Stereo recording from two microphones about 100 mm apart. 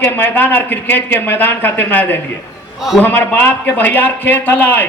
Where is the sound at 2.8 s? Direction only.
5° right (ahead or behind).